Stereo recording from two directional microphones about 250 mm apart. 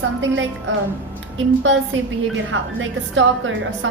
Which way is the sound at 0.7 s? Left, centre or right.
Right.